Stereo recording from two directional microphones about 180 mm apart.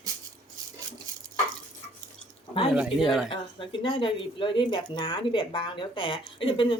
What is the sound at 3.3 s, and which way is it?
Speech, 30° left (ahead or behind).